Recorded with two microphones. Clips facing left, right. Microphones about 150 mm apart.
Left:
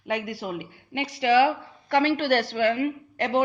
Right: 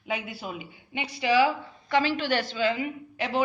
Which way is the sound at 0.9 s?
65° left (ahead or behind).